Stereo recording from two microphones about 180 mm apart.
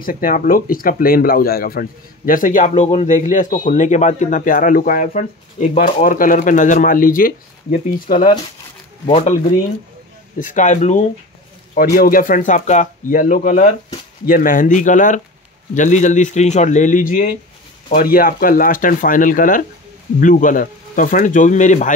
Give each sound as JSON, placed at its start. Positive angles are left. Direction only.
{"t": 0.0, "sound": "speech", "side_deg": 50}
{"t": 9.0, "sound": "speech", "side_deg": 35}
{"t": 10.4, "sound": "speech", "side_deg": 45}
{"t": 11.7, "sound": "speech", "side_deg": 50}